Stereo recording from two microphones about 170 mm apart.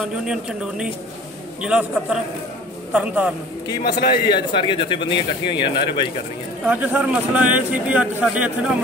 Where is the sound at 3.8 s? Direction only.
65° left (ahead or behind).